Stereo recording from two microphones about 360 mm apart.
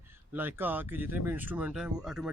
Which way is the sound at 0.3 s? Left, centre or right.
Centre.